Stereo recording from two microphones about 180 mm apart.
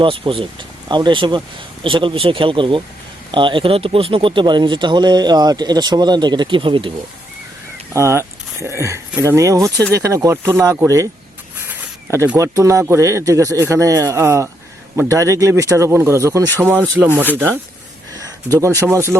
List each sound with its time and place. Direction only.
0.0 s speech: 30° right (ahead or behind)
7.9 s speech: 15° right (ahead or behind)
18.6 s speech: 15° right (ahead or behind)